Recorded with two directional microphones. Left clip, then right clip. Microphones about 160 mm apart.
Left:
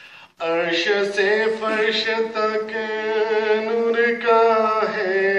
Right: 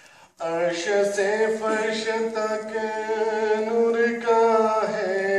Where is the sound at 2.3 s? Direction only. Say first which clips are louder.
Left 4 dB; 20° right (ahead or behind).